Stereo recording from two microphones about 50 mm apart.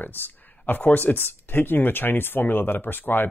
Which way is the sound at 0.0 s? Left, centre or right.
Left.